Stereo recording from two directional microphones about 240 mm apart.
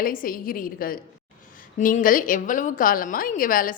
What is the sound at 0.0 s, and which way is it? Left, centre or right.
A woman's voice, left.